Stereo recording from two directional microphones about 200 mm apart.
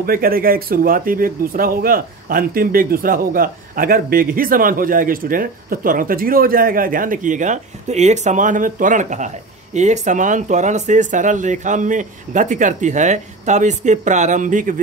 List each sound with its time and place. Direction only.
0.0 s speech: 45° right (ahead or behind)